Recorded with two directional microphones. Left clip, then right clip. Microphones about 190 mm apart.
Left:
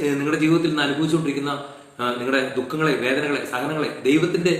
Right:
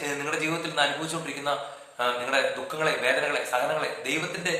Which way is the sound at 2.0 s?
15° right (ahead or behind).